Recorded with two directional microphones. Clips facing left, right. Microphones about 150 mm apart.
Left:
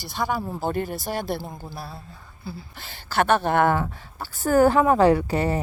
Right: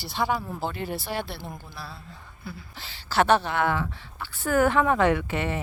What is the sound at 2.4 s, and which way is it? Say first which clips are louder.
Speech: left 3 dB; 30° left (ahead or behind).